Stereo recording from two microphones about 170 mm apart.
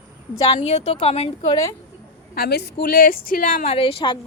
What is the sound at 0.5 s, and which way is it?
Speech, 40° left (ahead or behind).